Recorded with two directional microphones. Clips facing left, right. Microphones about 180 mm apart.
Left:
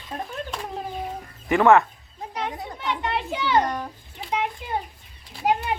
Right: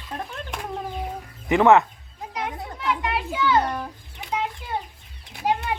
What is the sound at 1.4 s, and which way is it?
Speech, 20° right (ahead or behind).